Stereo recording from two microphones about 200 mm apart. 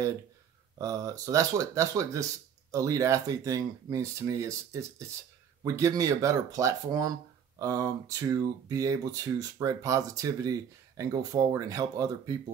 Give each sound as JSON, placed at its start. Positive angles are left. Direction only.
{"t": 0.7, "sound": "speech", "side_deg": -15}